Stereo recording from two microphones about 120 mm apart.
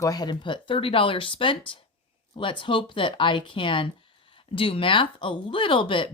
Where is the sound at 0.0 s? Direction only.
30° left (ahead or behind).